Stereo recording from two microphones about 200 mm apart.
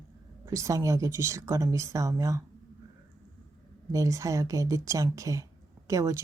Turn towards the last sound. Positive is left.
turn(degrees=-15)  # may be behind; listen again after turning